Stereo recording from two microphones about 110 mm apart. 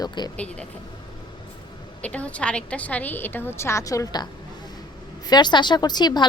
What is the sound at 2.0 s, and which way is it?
A woman's voice, 10° left (ahead or behind).